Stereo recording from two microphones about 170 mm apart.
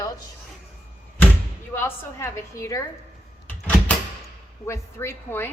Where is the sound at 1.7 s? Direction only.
15° left (ahead or behind).